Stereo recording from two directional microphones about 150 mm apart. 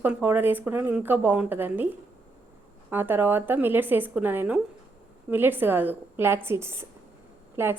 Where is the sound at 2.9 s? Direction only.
15° right (ahead or behind).